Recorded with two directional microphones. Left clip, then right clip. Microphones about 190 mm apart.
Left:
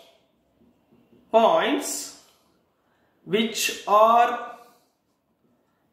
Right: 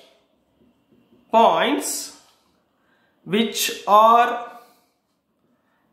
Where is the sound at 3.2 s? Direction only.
40° right (ahead or behind).